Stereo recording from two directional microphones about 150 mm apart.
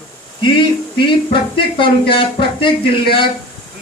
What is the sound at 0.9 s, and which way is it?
A woman's voice, 35° left (ahead or behind).